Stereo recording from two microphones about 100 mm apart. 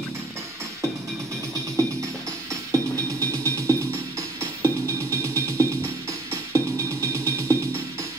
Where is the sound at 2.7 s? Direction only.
30° right (ahead or behind).